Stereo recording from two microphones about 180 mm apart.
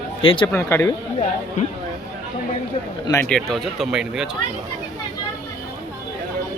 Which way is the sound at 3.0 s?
15° left (ahead or behind).